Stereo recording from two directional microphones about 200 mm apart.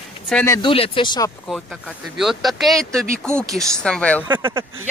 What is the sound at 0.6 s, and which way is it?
Speech, 25° left (ahead or behind).